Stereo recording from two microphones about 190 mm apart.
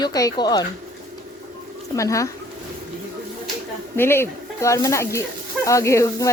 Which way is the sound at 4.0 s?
10° left (ahead or behind).